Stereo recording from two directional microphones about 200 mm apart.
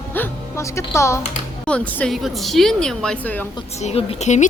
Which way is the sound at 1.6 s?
5° left (ahead or behind).